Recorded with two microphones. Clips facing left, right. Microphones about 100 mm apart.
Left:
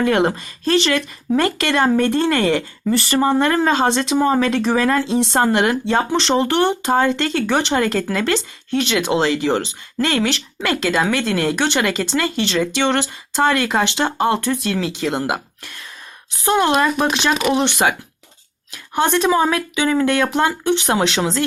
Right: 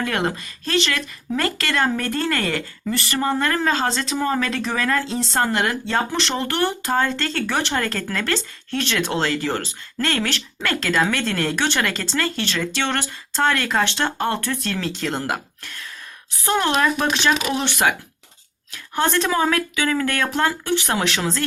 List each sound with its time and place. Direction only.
0.0 s speech: 25° left (ahead or behind)
2.9 s speech: 30° left (ahead or behind); by 17.3 s 15° left (ahead or behind)
18.7 s speech: 10° left (ahead or behind)